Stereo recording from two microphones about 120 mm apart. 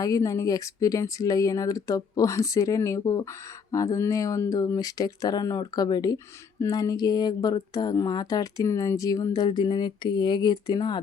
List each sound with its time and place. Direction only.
0.0 s speech: 30° left (ahead or behind)